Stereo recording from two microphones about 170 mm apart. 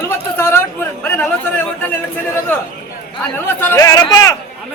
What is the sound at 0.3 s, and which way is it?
Chatter, 15° left (ahead or behind).